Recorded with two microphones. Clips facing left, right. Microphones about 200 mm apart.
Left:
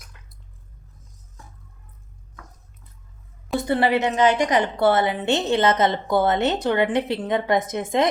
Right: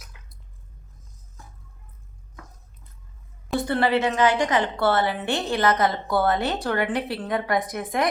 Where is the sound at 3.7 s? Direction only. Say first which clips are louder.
Left 2 dB; 20° left (ahead or behind).